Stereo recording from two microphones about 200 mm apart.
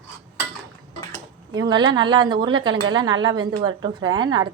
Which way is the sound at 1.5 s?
20° right (ahead or behind).